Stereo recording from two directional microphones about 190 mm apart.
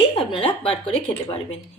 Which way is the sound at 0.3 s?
30° left (ahead or behind).